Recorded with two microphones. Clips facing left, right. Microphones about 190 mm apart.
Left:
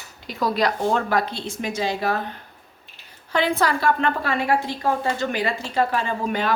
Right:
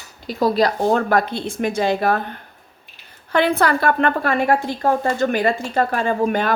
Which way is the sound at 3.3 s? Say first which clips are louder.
Right 4 dB; 60° right (ahead or behind).